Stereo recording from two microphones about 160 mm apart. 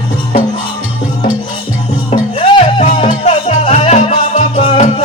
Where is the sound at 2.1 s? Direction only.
40° left (ahead or behind).